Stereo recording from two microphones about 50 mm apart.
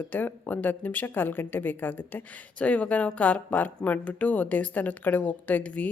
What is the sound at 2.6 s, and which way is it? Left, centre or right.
A woman's voice, left.